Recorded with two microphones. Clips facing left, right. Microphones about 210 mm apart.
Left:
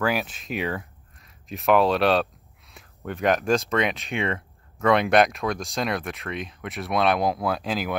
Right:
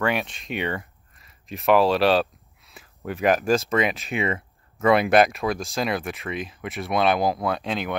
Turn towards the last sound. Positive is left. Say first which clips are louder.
# even
turn(degrees=0)  # may be behind; listen again after turning